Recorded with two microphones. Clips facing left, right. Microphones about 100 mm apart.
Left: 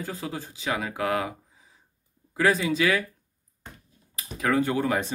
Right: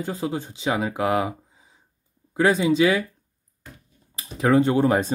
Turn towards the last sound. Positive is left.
turn(degrees=-30)  # may be behind; listen again after turning